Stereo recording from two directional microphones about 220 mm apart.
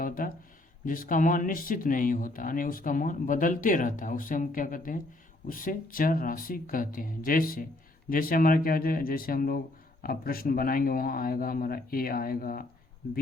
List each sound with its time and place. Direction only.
0.9 s speech: 40° left (ahead or behind)